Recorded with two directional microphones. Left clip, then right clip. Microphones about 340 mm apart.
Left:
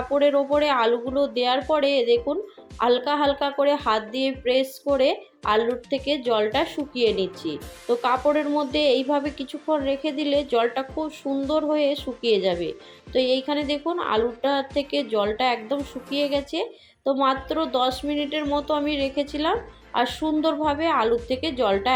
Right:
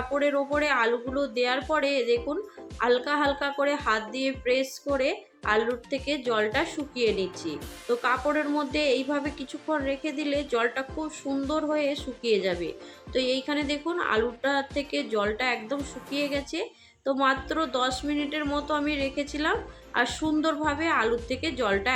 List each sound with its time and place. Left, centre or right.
0.2 s speech: centre
7.0 s speech: centre
7.4 s speech: centre